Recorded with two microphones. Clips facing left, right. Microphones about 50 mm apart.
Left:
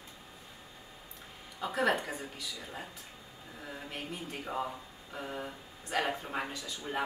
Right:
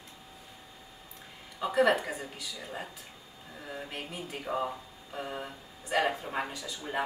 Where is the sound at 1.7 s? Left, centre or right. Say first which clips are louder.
Right 5 dB; centre.